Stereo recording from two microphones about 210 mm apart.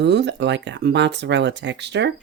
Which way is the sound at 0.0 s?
55° right (ahead or behind).